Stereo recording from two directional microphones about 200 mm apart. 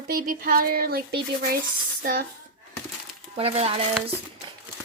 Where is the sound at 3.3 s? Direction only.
30° right (ahead or behind).